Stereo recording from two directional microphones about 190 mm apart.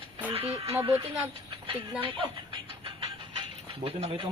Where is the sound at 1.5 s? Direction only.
25° right (ahead or behind).